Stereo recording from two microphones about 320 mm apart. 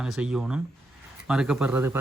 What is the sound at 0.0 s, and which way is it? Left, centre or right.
Speech, centre.